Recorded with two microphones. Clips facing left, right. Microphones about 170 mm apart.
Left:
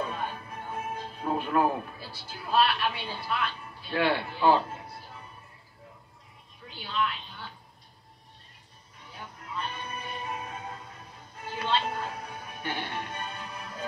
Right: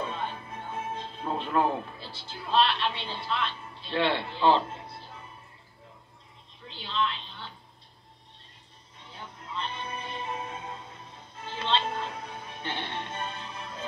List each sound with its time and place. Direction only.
0.1 s a man's voice: 25° right (ahead or behind)
6.7 s a woman's voice: 25° right (ahead or behind)
9.0 s music: 25° right (ahead or behind)